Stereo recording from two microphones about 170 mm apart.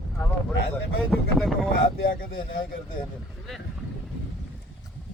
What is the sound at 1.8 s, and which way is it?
A man's voice, 60° left (ahead or behind).